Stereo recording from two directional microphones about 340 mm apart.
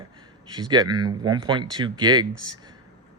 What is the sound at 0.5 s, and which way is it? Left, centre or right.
Speech, centre.